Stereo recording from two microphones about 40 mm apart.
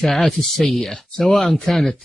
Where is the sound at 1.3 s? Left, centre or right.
Centre.